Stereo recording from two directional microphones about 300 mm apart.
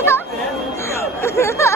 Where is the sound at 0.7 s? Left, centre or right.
Centre.